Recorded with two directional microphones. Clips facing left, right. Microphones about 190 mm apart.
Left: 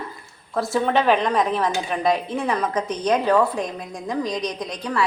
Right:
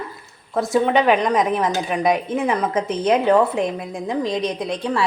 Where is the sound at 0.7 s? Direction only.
10° right (ahead or behind).